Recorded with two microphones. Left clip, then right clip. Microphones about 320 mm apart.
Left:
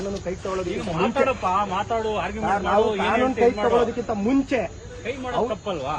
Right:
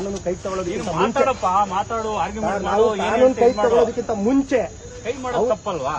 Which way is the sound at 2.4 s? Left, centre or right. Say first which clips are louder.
Right 1 dB; centre.